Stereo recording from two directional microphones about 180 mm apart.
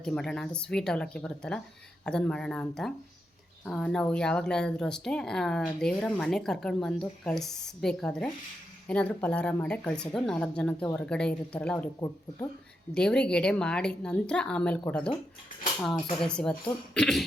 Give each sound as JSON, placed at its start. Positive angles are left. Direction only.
{"t": 0.0, "sound": "speech", "side_deg": 5}
{"t": 11.9, "sound": "speech", "side_deg": 20}
{"t": 12.9, "sound": "speech", "side_deg": 5}
{"t": 16.2, "sound": "speech", "side_deg": 5}